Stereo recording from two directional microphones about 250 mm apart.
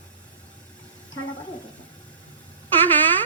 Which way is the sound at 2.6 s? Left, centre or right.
Centre.